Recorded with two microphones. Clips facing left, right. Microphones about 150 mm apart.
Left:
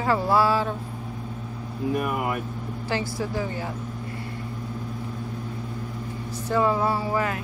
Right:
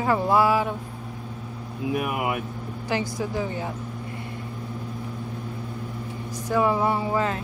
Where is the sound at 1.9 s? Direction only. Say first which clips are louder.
Even; 10° right (ahead or behind).